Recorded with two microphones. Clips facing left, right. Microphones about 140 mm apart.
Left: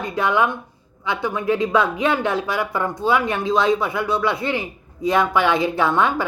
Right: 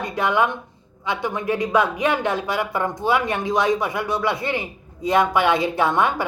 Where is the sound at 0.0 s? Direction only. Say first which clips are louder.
Left 1 dB; 20° right (ahead or behind).